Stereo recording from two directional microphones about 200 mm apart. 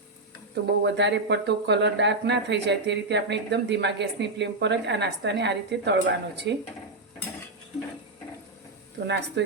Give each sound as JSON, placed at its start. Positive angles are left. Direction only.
{"t": 0.5, "sound": "speech", "side_deg": -60}
{"t": 9.0, "sound": "speech", "side_deg": -60}